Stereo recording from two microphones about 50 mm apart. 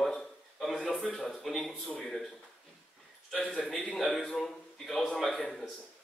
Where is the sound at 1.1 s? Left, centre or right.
Centre.